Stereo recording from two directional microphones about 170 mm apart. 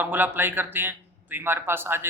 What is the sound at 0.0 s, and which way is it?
A man's voice, 10° right (ahead or behind).